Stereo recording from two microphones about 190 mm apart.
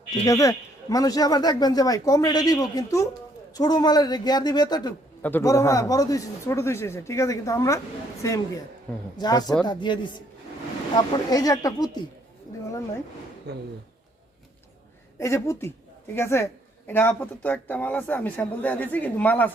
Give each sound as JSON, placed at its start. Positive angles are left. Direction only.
{"t": 0.1, "sound": "speech", "side_deg": 15}
{"t": 13.5, "sound": "speech", "side_deg": -60}
{"t": 15.2, "sound": "speech", "side_deg": 15}